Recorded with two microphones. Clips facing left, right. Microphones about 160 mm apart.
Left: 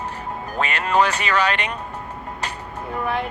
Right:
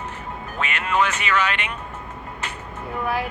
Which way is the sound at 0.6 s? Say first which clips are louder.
Left 3 dB; 35° left (ahead or behind).